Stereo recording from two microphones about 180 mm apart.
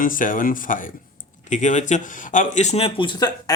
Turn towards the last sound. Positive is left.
turn(degrees=20)  # may be behind; listen again after turning